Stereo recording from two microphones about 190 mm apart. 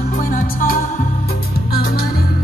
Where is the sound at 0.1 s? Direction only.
45° left (ahead or behind).